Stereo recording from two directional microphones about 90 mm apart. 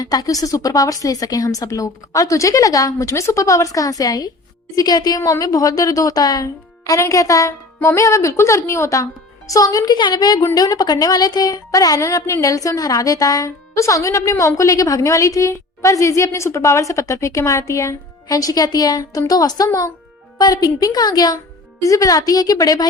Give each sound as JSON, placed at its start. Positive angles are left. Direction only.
{"t": 0.0, "sound": "a woman's voice", "side_deg": 45}